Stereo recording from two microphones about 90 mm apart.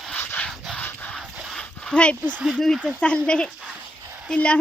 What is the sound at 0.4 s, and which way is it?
Rub, 5° left (ahead or behind).